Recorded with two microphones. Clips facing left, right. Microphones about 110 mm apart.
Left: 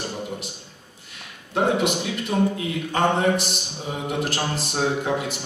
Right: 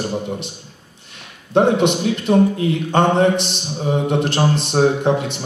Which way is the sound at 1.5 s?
25° right (ahead or behind).